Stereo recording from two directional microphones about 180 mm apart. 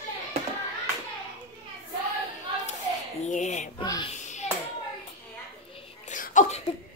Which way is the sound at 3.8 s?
25° left (ahead or behind).